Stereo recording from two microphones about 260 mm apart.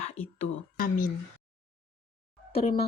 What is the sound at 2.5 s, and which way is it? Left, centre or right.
Speech, left.